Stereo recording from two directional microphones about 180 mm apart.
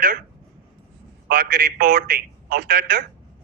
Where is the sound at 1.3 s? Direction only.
55° right (ahead or behind).